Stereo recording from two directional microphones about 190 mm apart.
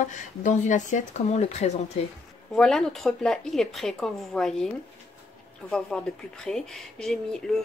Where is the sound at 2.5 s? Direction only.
5° left (ahead or behind).